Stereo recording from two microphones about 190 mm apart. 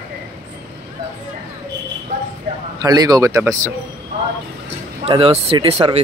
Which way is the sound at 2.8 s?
20° right (ahead or behind).